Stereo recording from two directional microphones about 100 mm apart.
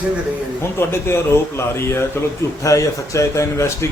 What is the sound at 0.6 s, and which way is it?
Speech, 25° left (ahead or behind).